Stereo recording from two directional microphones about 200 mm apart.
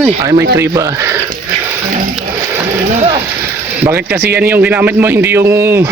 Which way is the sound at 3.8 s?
10° right (ahead or behind).